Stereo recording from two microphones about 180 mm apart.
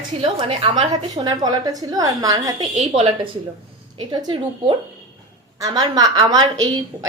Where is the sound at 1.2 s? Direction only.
20° right (ahead or behind).